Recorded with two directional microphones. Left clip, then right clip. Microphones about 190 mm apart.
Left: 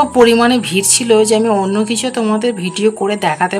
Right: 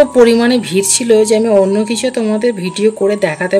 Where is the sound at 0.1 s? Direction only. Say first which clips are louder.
Right 1 dB; 15° right (ahead or behind).